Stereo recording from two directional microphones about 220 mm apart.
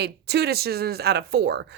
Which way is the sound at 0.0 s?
50° right (ahead or behind).